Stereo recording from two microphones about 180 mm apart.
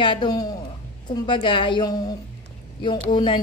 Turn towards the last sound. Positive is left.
turn(degrees=25)  # may be behind; listen again after turning